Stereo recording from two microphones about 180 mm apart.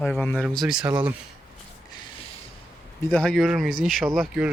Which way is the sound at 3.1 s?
5° left (ahead or behind).